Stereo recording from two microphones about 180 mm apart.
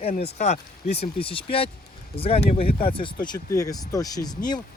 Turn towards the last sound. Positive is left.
turn(degrees=20)  # may be behind; listen again after turning